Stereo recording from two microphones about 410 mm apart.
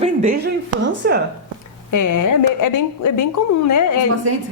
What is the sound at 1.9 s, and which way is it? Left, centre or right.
A woman's voice, left.